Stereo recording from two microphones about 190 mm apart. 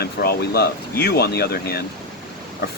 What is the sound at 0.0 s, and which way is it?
Speech, 55° left (ahead or behind).